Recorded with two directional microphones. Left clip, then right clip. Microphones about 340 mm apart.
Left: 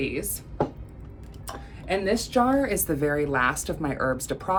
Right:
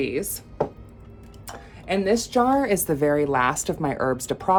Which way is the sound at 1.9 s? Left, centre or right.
Right.